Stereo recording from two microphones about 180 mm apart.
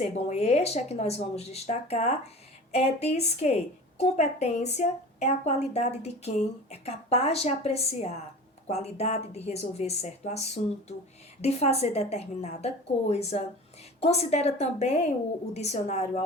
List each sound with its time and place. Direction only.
0.0 s a woman's voice: 40° left (ahead or behind)